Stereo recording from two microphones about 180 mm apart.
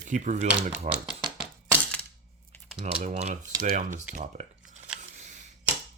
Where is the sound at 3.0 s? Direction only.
40° right (ahead or behind).